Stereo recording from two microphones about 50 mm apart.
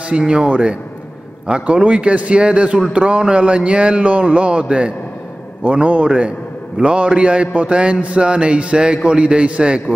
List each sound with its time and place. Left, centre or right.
0.3 s a man's voice: right